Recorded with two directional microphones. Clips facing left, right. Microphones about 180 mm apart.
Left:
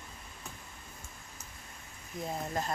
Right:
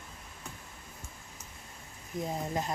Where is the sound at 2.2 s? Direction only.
15° right (ahead or behind).